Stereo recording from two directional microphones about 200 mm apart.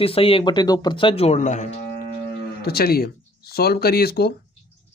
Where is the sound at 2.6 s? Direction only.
50° left (ahead or behind).